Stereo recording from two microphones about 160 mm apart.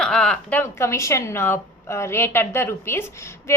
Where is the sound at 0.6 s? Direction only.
15° left (ahead or behind).